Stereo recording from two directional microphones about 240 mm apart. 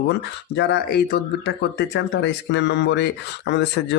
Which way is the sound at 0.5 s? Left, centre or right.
Left.